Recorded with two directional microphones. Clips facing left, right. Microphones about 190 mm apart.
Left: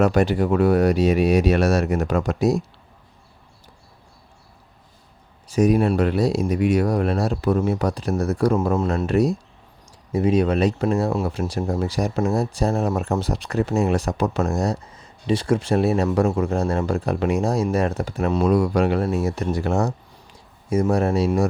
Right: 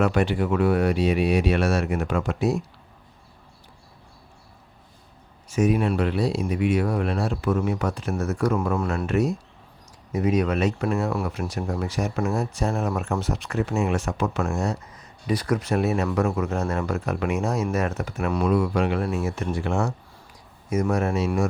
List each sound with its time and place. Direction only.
0.0 s speech: 40° left (ahead or behind)
5.5 s speech: 35° left (ahead or behind)
18.4 s speech: 40° left (ahead or behind)